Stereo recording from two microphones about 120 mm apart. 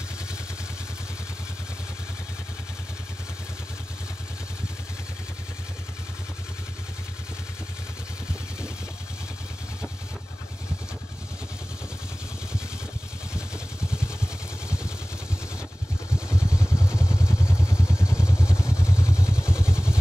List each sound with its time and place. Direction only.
13.9 s vehicle: 5° right (ahead or behind)
16.3 s vehicle: 5° right (ahead or behind)
17.5 s vehicle: 25° left (ahead or behind)
17.7 s vehicle: 5° right (ahead or behind)
18.5 s vehicle: 25° left (ahead or behind)
19.1 s vehicle: 5° right (ahead or behind)